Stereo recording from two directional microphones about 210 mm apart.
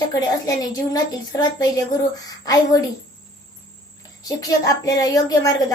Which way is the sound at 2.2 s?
20° left (ahead or behind).